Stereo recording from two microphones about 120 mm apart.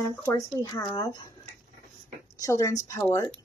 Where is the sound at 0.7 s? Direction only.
30° left (ahead or behind).